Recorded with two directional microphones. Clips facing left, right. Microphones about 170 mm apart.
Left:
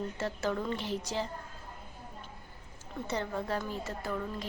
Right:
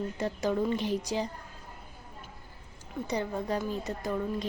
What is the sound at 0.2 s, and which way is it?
A woman's voice, 15° right (ahead or behind).